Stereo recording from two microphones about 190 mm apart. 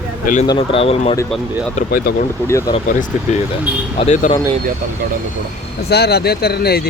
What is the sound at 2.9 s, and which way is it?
Speech, 45° left (ahead or behind).